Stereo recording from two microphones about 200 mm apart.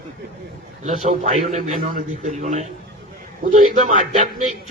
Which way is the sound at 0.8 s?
40° right (ahead or behind).